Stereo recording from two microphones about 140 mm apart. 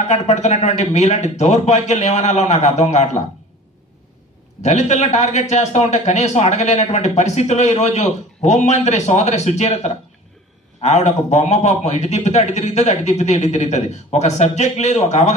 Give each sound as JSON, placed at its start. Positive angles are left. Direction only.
{"t": 0.1, "sound": "a man's voice", "side_deg": 50}
{"t": 4.6, "sound": "a man's voice", "side_deg": 50}